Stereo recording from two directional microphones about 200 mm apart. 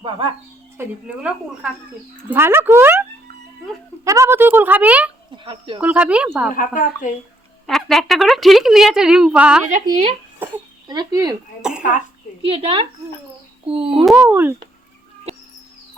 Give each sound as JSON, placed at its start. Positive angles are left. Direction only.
{"t": 0.8, "sound": "a woman's voice", "side_deg": -5}
{"t": 4.0, "sound": "a woman's voice", "side_deg": -15}
{"t": 5.5, "sound": "speech", "side_deg": -25}
{"t": 5.8, "sound": "a woman's voice", "side_deg": -5}
{"t": 6.5, "sound": "speech", "side_deg": 40}
{"t": 7.7, "sound": "a woman's voice", "side_deg": 0}
{"t": 9.7, "sound": "speech", "side_deg": -30}
{"t": 10.8, "sound": "speech", "side_deg": -20}
{"t": 11.8, "sound": "a child's voice", "side_deg": 40}
{"t": 12.5, "sound": "speech", "side_deg": -25}
{"t": 14.0, "sound": "a woman's voice", "side_deg": -5}